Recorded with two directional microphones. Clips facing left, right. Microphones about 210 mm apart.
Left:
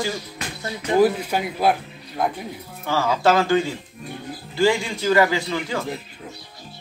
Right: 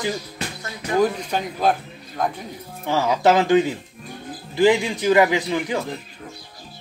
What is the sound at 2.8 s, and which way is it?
A man's voice, 20° right (ahead or behind).